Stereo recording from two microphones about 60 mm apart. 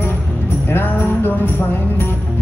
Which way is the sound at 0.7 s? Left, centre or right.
Left.